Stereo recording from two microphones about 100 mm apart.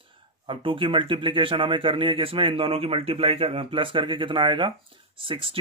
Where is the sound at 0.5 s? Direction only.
60° right (ahead or behind).